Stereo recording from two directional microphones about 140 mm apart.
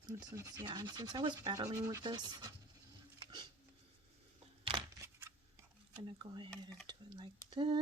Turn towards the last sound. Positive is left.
turn(degrees=-35)  # may be behind; listen again after turning